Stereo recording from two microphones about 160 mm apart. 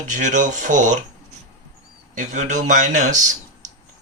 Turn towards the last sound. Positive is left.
turn(degrees=-50)  # may be behind; listen again after turning